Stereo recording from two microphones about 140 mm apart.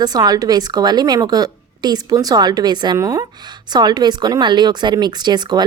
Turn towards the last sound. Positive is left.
turn(degrees=-30)  # may be behind; listen again after turning